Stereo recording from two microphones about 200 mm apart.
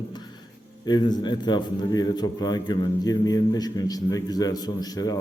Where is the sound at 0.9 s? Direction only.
20° left (ahead or behind).